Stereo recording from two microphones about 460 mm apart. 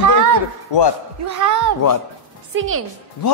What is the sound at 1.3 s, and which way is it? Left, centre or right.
Speech, right.